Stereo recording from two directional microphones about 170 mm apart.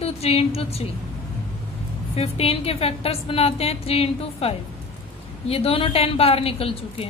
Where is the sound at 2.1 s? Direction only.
35° left (ahead or behind).